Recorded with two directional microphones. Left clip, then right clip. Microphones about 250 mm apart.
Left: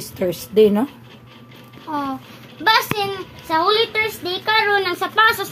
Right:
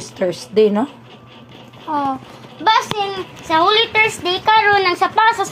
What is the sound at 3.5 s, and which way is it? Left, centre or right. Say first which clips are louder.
Speech: right 3 dB; left.